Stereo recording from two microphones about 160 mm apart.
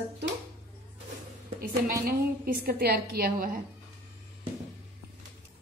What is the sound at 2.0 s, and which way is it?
A woman's voice, 75° right (ahead or behind).